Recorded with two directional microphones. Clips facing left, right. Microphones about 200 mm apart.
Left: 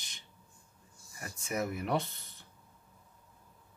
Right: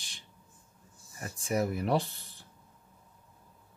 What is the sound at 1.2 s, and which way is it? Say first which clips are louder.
Speech: right 5 dB; 35° right (ahead or behind).